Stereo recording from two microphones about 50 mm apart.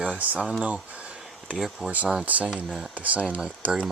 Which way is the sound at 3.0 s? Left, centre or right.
Right.